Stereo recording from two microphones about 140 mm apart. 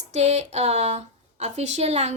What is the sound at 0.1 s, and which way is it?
Speech, 55° right (ahead or behind).